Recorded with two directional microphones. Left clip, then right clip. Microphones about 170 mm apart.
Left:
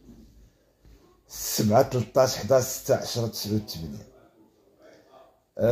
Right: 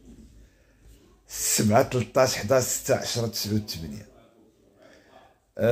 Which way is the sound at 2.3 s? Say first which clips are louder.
Left 1 dB; 15° right (ahead or behind).